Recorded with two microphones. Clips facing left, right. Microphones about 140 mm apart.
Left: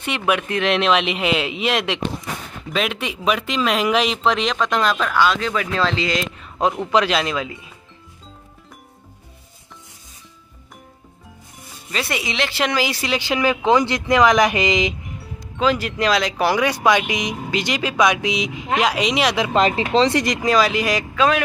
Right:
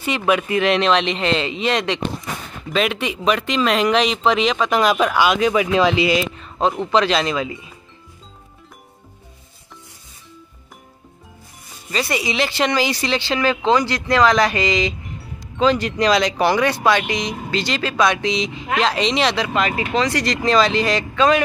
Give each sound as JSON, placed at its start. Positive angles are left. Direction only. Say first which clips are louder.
{"t": 0.0, "sound": "speech", "louder": "right 2 dB", "side_deg": 0}
{"t": 11.9, "sound": "speech", "louder": "right 3 dB", "side_deg": 0}
{"t": 15.5, "sound": "speech", "louder": "right 2 dB", "side_deg": 5}
{"t": 19.5, "sound": "speech", "louder": "left 3 dB", "side_deg": 30}
{"t": 20.4, "sound": "speech", "louder": "right 3 dB", "side_deg": 10}